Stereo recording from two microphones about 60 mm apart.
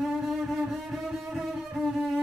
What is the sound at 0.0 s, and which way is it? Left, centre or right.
Music, centre.